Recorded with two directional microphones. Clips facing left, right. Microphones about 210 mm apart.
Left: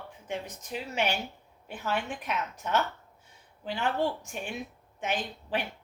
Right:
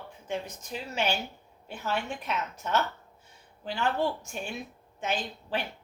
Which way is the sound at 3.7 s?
15° left (ahead or behind).